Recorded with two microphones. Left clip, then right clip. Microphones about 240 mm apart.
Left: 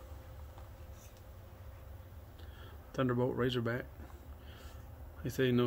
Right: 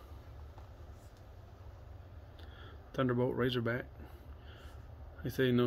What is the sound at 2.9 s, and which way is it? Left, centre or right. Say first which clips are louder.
Speech: right 1 dB; centre.